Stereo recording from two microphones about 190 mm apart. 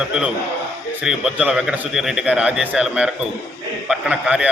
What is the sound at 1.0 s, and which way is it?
A man's voice, 5° right (ahead or behind).